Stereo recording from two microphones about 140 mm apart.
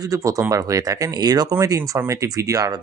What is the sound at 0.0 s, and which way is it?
Speech, 25° right (ahead or behind).